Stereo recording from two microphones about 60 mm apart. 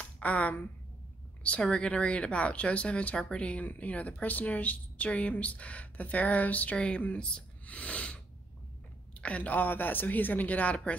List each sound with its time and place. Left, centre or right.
0.0 s a woman's voice: left
1.7 s speech: centre
9.2 s speech: left